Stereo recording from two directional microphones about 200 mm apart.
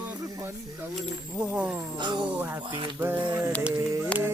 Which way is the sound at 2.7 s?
25° right (ahead or behind).